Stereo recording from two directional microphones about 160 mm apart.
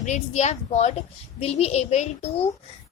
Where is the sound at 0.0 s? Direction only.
45° left (ahead or behind).